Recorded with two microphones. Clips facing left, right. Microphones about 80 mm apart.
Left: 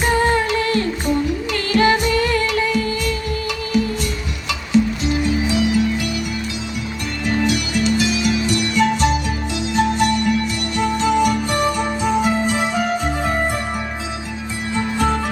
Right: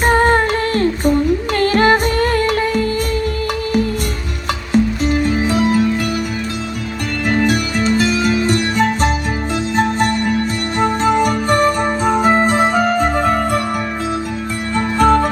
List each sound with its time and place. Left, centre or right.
0.0 s music: right
4.7 s music: right
7.3 s music: right
14.8 s music: right